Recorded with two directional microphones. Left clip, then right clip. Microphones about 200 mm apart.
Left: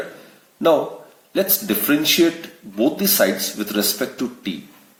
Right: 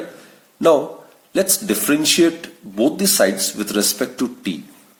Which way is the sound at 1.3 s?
40° right (ahead or behind).